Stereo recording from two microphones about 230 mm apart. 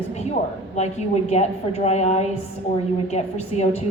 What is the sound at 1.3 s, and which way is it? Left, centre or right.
A woman's voice, left.